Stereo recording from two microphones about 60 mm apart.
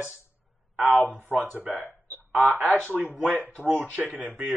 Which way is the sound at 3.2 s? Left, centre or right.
Right.